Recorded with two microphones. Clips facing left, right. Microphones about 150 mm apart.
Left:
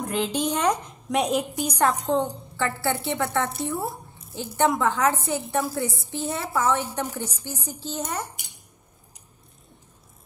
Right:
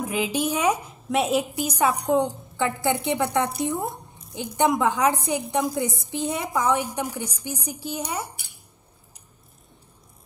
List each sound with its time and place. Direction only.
0.0 s a woman's voice: 10° right (ahead or behind)